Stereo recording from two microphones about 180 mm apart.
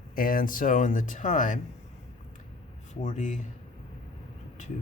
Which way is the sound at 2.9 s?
40° left (ahead or behind).